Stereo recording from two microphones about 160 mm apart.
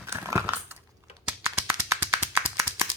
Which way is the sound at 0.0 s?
15° right (ahead or behind).